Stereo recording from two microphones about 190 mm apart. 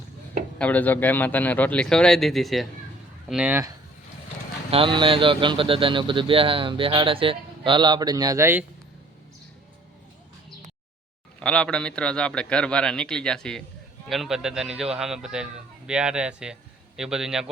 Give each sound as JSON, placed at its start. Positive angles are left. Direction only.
{"t": 0.6, "sound": "a man's voice", "side_deg": 10}
{"t": 4.7, "sound": "a man's voice", "side_deg": -25}
{"t": 11.3, "sound": "a man's voice", "side_deg": 5}